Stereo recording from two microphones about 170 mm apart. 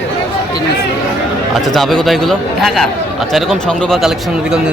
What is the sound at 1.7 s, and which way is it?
Speech, centre (ahead or behind).